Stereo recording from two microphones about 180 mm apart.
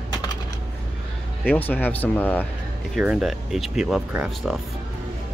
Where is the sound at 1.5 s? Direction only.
10° left (ahead or behind).